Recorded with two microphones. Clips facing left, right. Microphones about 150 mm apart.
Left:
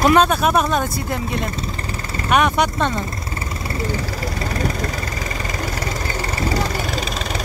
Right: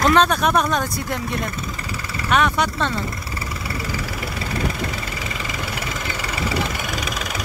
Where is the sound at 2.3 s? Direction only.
15° left (ahead or behind).